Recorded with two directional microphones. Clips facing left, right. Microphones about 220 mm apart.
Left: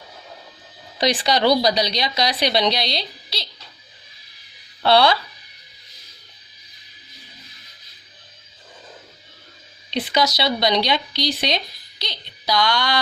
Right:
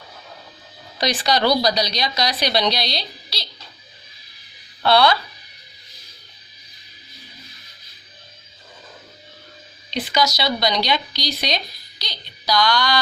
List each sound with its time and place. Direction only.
0.9 s speech: 25° left (ahead or behind)
4.8 s speech: 30° left (ahead or behind)
9.9 s speech: 30° left (ahead or behind)